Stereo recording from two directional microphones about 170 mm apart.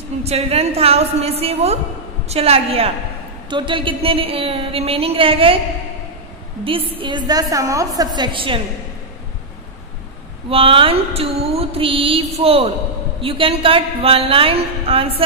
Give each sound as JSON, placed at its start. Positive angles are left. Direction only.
{"t": 0.2, "sound": "a woman's voice", "side_deg": -35}
{"t": 6.6, "sound": "a woman's voice", "side_deg": -30}
{"t": 10.5, "sound": "a woman's voice", "side_deg": -30}